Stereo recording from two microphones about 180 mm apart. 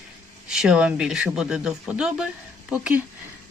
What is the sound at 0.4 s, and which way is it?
A woman's voice, 5° right (ahead or behind).